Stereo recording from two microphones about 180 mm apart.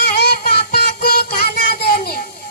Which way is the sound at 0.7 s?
60° left (ahead or behind).